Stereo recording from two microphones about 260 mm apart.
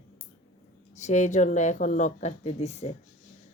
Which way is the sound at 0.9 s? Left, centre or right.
Left.